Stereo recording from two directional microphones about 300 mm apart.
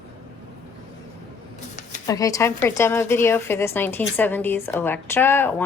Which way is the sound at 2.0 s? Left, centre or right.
Centre.